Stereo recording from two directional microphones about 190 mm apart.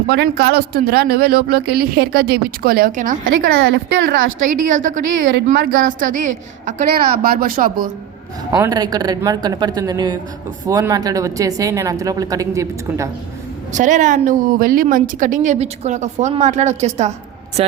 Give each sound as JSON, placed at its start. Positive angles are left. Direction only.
{"t": 0.1, "sound": "a woman's voice", "side_deg": -55}
{"t": 3.6, "sound": "a woman's voice", "side_deg": -65}
{"t": 4.4, "sound": "a woman's voice", "side_deg": -40}
{"t": 8.5, "sound": "a woman's voice", "side_deg": -20}
{"t": 13.7, "sound": "a woman's voice", "side_deg": -40}